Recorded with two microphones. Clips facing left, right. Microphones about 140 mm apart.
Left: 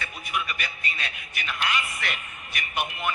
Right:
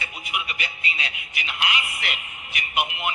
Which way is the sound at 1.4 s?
15° right (ahead or behind).